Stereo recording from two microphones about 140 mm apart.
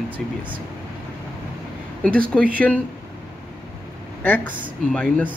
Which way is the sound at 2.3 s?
10° left (ahead or behind).